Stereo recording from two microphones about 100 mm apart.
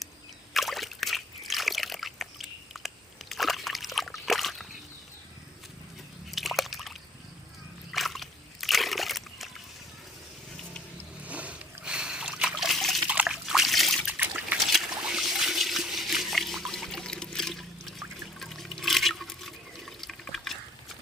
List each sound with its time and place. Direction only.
0.5 s a sound: centre (ahead or behind)
6.3 s a sound: centre (ahead or behind)
7.9 s slosh: centre (ahead or behind)
11.3 s splash: 15° right (ahead or behind)
13.1 s trickle: 10° right (ahead or behind)
14.1 s trickle: 15° right (ahead or behind)
14.7 s trickle: 5° right (ahead or behind)
18.3 s water: centre (ahead or behind)